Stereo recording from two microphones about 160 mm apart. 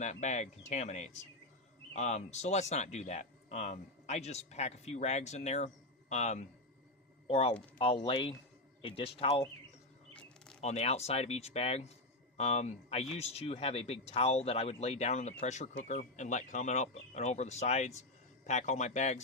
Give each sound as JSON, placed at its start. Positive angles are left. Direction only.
{"t": 0.0, "sound": "speech", "side_deg": 45}
{"t": 10.2, "sound": "a sound", "side_deg": 5}
{"t": 10.6, "sound": "speech", "side_deg": 40}